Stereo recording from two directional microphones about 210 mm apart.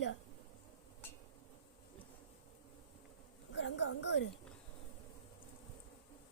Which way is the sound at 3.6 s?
55° left (ahead or behind).